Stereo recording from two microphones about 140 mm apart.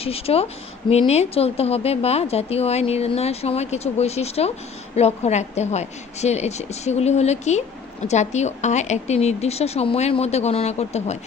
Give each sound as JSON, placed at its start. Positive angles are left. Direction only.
{"t": 0.0, "sound": "a woman's voice", "side_deg": 45}